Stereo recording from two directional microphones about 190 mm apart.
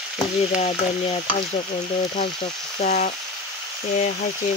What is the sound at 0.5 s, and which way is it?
Speech, 35° left (ahead or behind).